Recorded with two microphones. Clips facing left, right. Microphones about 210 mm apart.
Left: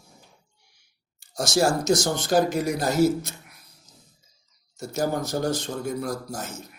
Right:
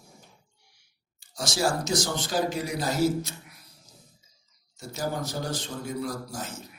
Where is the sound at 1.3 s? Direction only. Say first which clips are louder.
Left 5 dB; 45° left (ahead or behind).